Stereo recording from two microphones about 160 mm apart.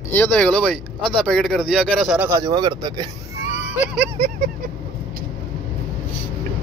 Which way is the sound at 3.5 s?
5° right (ahead or behind).